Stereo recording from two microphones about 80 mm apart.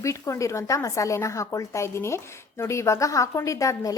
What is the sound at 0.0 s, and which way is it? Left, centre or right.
A woman's voice, left.